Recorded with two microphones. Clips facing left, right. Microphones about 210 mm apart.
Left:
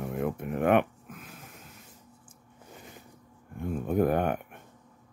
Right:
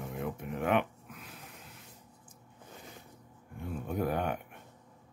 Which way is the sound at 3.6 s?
50° left (ahead or behind).